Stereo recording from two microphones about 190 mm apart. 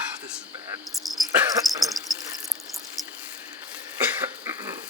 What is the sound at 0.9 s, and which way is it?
Speech, centre (ahead or behind).